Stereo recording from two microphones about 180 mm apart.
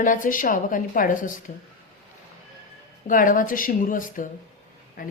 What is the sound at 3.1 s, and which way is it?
Speech, 50° left (ahead or behind).